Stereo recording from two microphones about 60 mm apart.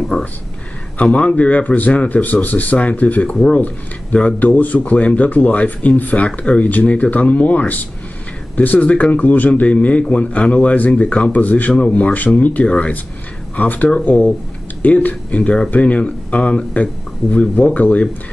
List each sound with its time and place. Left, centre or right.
0.1 s speech: centre
4.4 s speech: left